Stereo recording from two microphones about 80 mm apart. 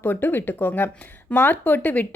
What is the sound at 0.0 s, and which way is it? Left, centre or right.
A woman's voice, left.